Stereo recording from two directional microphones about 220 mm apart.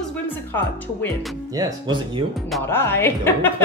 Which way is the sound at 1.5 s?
20° right (ahead or behind).